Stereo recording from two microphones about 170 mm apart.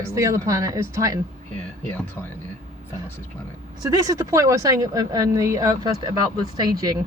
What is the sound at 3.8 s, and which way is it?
Speech, 20° right (ahead or behind).